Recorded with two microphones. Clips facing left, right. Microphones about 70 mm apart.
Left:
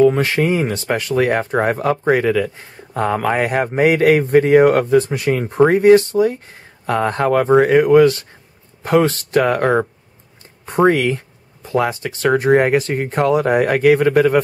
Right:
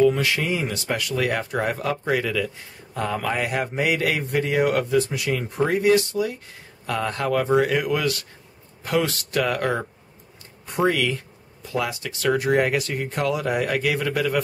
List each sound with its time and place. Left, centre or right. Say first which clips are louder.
0.0 s speech: left 6 dB; left